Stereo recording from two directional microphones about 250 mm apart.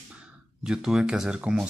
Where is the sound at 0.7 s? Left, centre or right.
Centre.